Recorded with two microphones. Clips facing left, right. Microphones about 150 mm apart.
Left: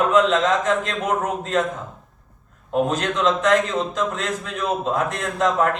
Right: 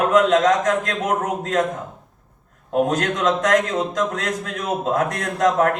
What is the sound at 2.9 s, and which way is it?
A man's voice, 50° right (ahead or behind).